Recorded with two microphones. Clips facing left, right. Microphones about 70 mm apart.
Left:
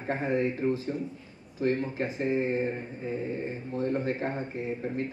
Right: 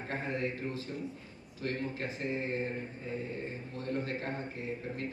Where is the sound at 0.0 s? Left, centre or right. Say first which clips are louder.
Left 7 dB; left.